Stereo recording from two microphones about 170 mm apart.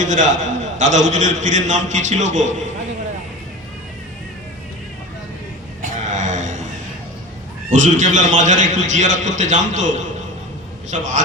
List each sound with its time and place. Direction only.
0.0 s a man's voice: 45° right (ahead or behind)
5.8 s a sound: 45° right (ahead or behind)
7.7 s a man's voice: 45° right (ahead or behind)